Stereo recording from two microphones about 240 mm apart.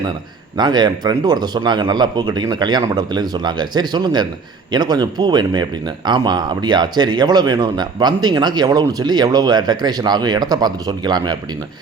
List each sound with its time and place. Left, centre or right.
0.5 s speech: centre